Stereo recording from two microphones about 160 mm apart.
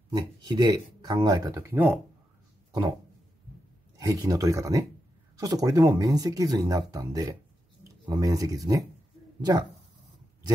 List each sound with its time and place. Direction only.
0.1 s speech: 25° right (ahead or behind); by 2.0 s 10° right (ahead or behind)
4.0 s speech: 20° right (ahead or behind)